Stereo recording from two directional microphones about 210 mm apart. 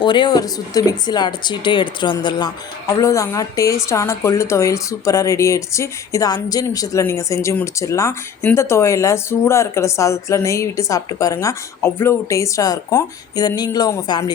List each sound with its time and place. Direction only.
0.0 s speech: 20° left (ahead or behind)